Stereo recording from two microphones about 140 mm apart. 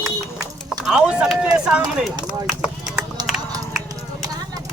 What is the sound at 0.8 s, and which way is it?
Speech, 5° right (ahead or behind).